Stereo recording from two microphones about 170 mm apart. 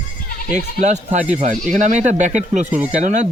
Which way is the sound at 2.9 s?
40° right (ahead or behind).